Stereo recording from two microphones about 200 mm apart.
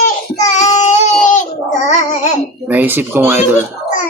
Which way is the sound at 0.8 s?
35° left (ahead or behind).